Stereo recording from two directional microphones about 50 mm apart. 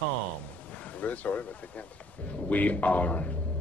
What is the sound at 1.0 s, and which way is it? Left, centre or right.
Speech, left.